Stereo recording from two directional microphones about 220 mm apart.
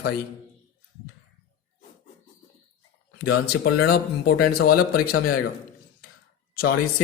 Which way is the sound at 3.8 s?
45° left (ahead or behind).